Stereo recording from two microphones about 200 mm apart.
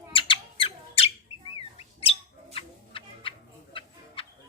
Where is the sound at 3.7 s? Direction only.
25° left (ahead or behind).